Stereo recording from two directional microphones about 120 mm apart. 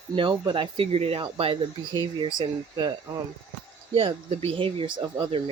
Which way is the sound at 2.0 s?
40° right (ahead or behind).